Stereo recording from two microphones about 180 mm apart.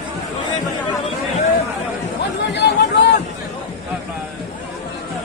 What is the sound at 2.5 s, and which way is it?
Chatter, 70° left (ahead or behind).